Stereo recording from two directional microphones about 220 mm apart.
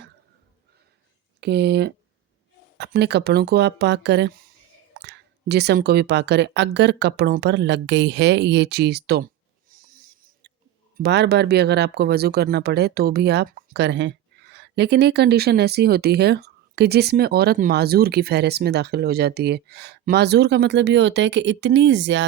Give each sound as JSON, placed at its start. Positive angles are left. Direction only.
{"t": 1.4, "sound": "speech", "side_deg": -50}
{"t": 9.8, "sound": "a sound", "side_deg": -40}
{"t": 10.9, "sound": "speech", "side_deg": -50}